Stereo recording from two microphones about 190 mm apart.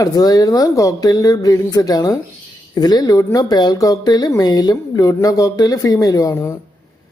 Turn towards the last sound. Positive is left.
turn(degrees=15)  # may be behind; listen again after turning